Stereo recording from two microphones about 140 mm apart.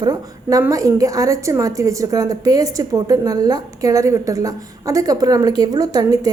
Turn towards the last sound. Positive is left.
turn(degrees=-25)  # may be behind; listen again after turning